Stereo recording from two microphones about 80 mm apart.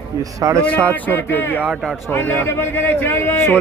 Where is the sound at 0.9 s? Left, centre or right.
Left.